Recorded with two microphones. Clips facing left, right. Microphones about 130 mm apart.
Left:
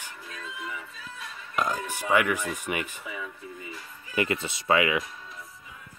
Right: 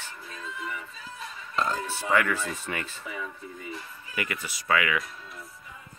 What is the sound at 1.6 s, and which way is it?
Speech, 15° left (ahead or behind).